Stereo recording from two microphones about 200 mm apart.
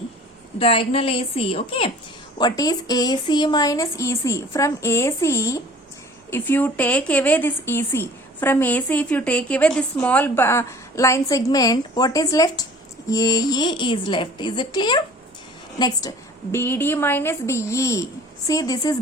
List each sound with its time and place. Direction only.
0.6 s a woman's voice: 30° left (ahead or behind)
2.4 s a woman's voice: 20° left (ahead or behind)